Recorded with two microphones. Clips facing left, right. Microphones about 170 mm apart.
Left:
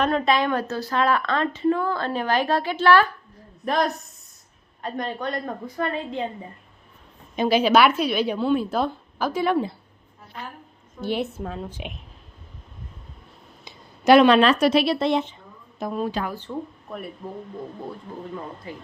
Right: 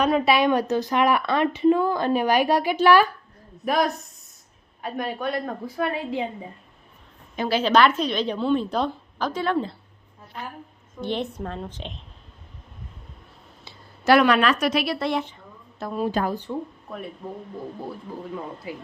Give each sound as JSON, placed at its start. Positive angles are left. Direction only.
{"t": 0.0, "sound": "a woman's voice", "side_deg": -10}
{"t": 3.7, "sound": "a woman's voice", "side_deg": -5}
{"t": 7.3, "sound": "a woman's voice", "side_deg": 15}
{"t": 11.0, "sound": "a woman's voice", "side_deg": 5}
{"t": 13.7, "sound": "a woman's voice", "side_deg": 20}
{"t": 16.3, "sound": "a woman's voice", "side_deg": -10}
{"t": 18.7, "sound": "a woman's voice", "side_deg": -10}